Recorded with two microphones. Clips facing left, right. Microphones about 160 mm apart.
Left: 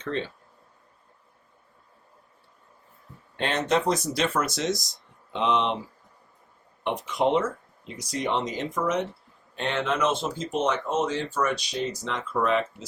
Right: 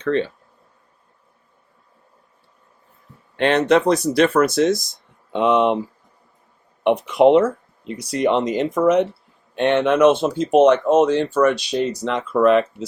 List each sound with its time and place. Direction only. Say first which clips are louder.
0.0 s speech: right 10 dB; 65° right (ahead or behind)
3.3 s speech: right 9 dB; 70° right (ahead or behind); by 5.7 s 55° right (ahead or behind)
6.8 s speech: right 11 dB; 65° right (ahead or behind)